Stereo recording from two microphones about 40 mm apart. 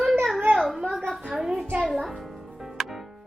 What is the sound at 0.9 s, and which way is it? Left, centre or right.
Speech, centre.